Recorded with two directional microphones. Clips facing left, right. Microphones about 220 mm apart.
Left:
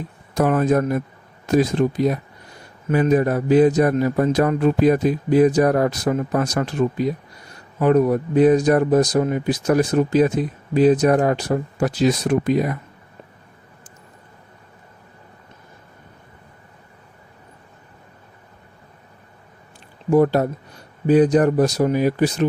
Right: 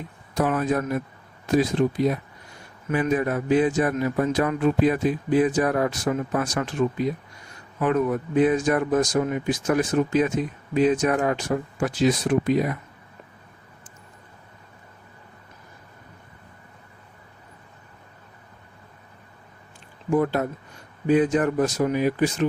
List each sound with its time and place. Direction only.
0.3 s a man's voice: 45° left (ahead or behind)
20.1 s a man's voice: 40° left (ahead or behind)